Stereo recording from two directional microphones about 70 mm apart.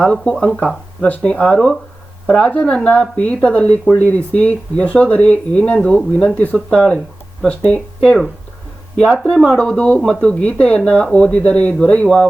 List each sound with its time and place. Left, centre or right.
0.0 s speech: centre
9.1 s speech: centre